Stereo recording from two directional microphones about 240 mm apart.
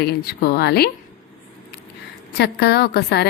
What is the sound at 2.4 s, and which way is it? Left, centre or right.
Speech, left.